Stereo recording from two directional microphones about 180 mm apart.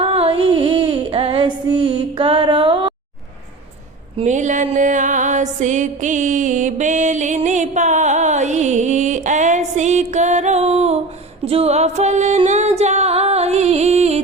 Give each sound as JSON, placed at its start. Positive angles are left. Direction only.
{"t": 0.0, "sound": "female singing", "side_deg": -30}
{"t": 4.2, "sound": "music", "side_deg": -40}